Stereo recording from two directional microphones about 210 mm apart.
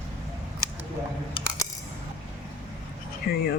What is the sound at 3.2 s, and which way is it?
Speech, 50° left (ahead or behind).